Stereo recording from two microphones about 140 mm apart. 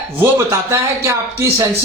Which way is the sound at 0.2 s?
20° right (ahead or behind).